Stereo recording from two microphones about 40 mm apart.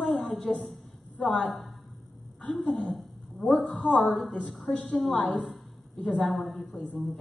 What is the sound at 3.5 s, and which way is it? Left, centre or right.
Speech, centre.